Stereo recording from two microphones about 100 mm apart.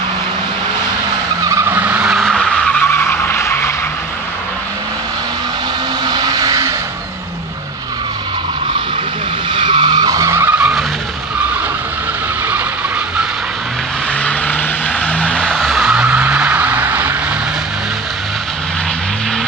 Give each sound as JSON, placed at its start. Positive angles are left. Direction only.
{"t": 1.4, "sound": "vehicle", "side_deg": -30}
{"t": 1.8, "sound": "vehicle", "side_deg": -10}
{"t": 2.1, "sound": "vehicle", "side_deg": 5}
{"t": 2.8, "sound": "vehicle", "side_deg": 20}
{"t": 6.0, "sound": "vehicle", "side_deg": -40}
{"t": 9.5, "sound": "vehicle", "side_deg": -50}
{"t": 10.6, "sound": "vehicle", "side_deg": -5}
{"t": 15.0, "sound": "vehicle", "side_deg": 10}
{"t": 15.8, "sound": "vehicle", "side_deg": -10}